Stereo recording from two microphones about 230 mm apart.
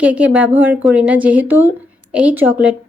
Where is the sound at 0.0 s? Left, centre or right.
Centre.